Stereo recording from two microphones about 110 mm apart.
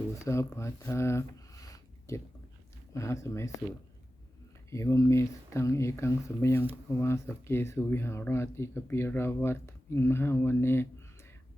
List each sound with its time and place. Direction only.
0.1 s speech: 25° left (ahead or behind)
4.7 s speech: 25° left (ahead or behind)